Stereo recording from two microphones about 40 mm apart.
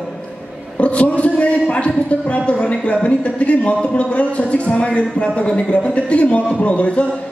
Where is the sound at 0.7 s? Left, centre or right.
Left.